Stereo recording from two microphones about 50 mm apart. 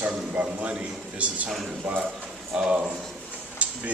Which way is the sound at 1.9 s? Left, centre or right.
Right.